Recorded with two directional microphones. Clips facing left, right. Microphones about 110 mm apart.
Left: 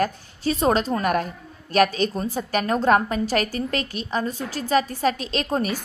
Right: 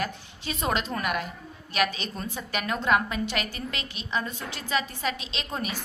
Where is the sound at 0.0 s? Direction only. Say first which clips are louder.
Left 9 dB; 40° left (ahead or behind).